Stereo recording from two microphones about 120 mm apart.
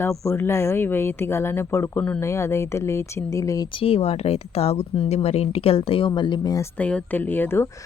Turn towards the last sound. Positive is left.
turn(degrees=20)  # may be behind; listen again after turning